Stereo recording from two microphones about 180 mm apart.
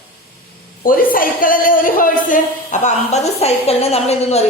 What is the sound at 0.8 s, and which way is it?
A woman's voice, 50° left (ahead or behind).